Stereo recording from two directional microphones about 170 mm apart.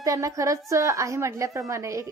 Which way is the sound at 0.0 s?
20° right (ahead or behind).